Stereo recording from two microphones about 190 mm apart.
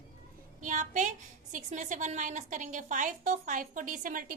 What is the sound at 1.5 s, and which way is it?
A woman's voice, 40° right (ahead or behind).